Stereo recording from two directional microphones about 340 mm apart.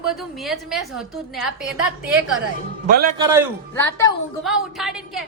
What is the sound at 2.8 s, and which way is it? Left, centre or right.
Speech, right.